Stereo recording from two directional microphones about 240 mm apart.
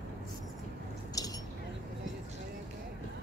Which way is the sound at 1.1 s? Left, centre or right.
Centre.